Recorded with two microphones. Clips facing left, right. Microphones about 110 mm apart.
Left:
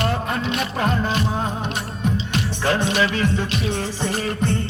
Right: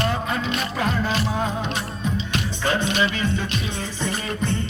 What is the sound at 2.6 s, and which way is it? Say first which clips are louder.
Music: left 2 dB; 80° left.